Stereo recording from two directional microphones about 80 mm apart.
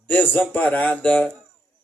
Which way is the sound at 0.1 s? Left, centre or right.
Left.